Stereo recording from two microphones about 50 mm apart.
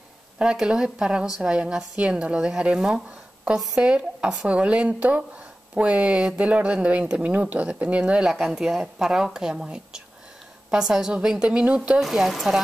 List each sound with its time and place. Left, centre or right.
0.4 s a woman's voice: centre
12.0 s speech: centre